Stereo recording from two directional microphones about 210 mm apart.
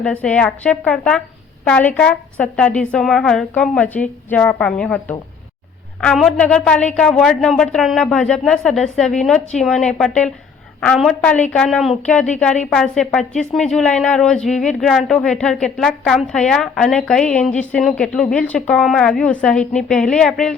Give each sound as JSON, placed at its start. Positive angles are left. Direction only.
{"t": 0.0, "sound": "a woman's voice", "side_deg": 5}